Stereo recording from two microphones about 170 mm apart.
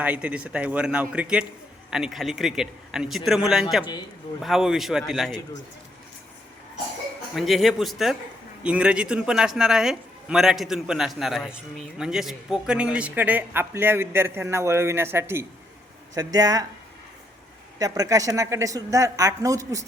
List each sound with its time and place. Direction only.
0.0 s a man's voice: 10° right (ahead or behind)
7.3 s a man's voice: centre (ahead or behind); by 16.6 s 20° right (ahead or behind)
17.7 s a woman's voice: 20° right (ahead or behind)